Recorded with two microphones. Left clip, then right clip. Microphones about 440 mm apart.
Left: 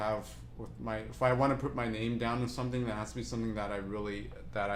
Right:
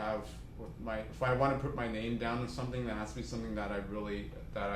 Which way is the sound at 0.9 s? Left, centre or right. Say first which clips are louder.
Left 3 dB; left.